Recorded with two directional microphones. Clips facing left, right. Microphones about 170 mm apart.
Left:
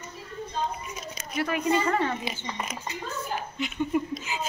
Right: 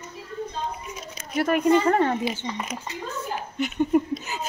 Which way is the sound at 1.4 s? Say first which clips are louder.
Right 6 dB; 50° right (ahead or behind).